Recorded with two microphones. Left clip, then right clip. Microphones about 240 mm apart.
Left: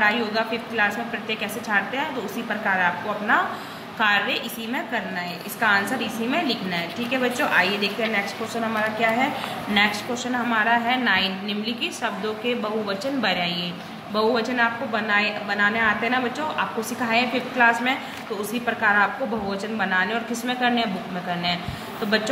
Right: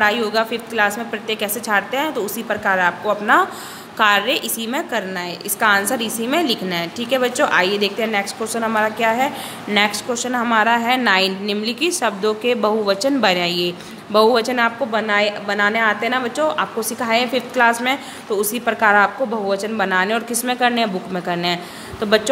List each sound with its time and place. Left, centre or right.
0.0 s a woman's voice: right